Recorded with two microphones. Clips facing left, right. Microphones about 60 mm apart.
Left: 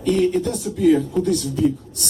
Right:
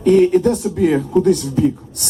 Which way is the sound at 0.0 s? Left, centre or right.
Right.